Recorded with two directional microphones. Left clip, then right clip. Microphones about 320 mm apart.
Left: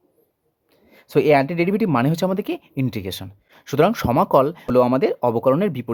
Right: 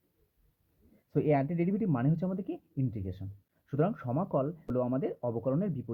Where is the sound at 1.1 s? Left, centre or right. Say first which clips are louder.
Left 13 dB; left.